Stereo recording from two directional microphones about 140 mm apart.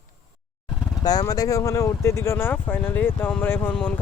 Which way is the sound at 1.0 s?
25° left (ahead or behind).